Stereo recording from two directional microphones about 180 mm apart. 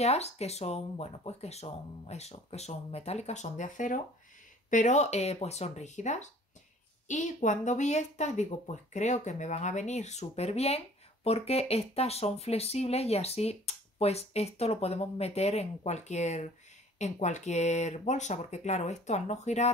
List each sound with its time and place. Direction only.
0.0 s speech: 35° left (ahead or behind)